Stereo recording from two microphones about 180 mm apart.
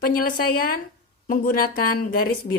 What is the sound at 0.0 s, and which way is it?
A woman's voice, 50° left (ahead or behind).